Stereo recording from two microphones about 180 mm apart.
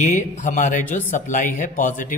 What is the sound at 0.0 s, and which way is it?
A man's voice, 40° left (ahead or behind).